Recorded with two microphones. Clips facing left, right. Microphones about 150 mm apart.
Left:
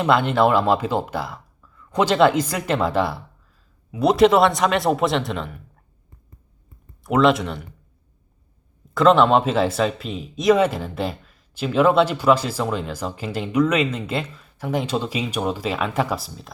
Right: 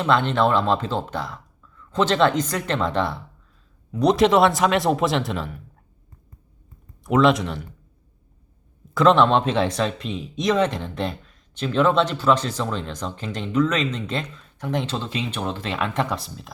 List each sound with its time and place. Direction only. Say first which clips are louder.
0.0 s a man's voice: left 2 dB; 10° left (ahead or behind)
7.0 s a man's voice: left 1 dB; centre (ahead or behind)
9.0 s speech: left 1 dB; centre (ahead or behind)